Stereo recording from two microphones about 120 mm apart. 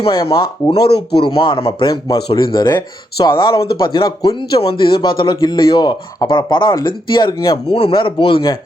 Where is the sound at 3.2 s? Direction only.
45° left (ahead or behind).